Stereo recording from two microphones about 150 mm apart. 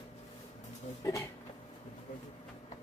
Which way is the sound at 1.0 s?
20° left (ahead or behind).